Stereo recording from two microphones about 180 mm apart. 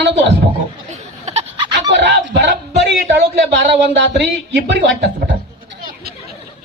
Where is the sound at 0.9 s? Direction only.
40° right (ahead or behind).